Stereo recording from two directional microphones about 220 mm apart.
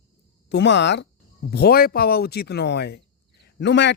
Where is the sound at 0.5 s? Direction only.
50° left (ahead or behind).